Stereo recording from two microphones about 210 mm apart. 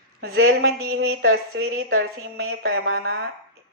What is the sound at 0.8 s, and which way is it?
Speech, 85° right.